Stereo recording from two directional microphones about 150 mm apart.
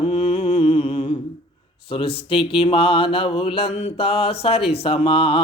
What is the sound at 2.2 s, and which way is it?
Mantra, 35° left (ahead or behind).